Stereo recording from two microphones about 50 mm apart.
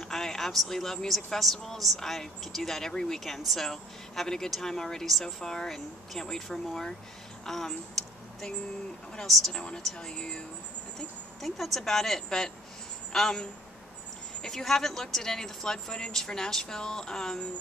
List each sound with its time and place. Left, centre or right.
0.0 s speech: centre
7.4 s a sound: centre
9.5 s a woman's voice: centre
11.4 s speech: centre